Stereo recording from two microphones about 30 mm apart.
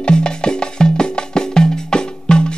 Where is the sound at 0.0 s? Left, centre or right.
Left.